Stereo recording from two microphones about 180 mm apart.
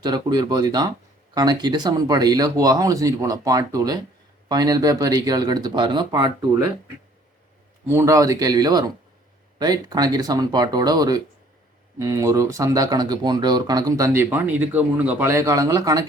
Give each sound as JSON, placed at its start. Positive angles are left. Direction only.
{"t": 0.0, "sound": "speech", "side_deg": -25}
{"t": 7.9, "sound": "speech", "side_deg": -15}